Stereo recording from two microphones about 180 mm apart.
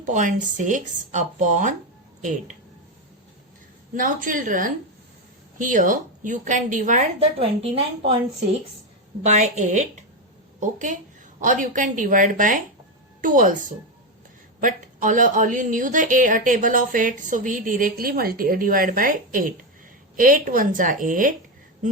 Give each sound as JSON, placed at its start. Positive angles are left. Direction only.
{"t": 0.0, "sound": "a woman's voice", "side_deg": -45}
{"t": 3.9, "sound": "a woman's voice", "side_deg": -50}
{"t": 9.2, "sound": "a woman's voice", "side_deg": -40}